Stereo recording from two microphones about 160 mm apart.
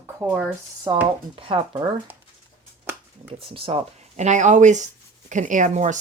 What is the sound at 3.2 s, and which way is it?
Speech, 35° right (ahead or behind).